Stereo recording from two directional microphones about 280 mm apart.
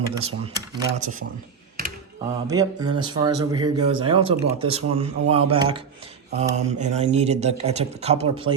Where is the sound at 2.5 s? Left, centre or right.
Centre.